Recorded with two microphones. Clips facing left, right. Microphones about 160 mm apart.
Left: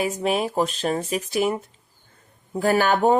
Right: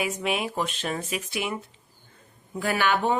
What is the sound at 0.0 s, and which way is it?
Speech, 35° left (ahead or behind).